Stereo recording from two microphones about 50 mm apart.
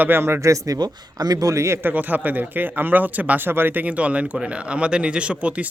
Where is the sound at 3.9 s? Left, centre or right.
Right.